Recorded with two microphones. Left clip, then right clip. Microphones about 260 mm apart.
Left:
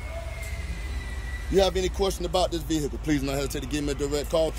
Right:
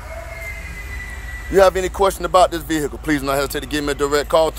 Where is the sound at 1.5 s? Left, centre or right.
Centre.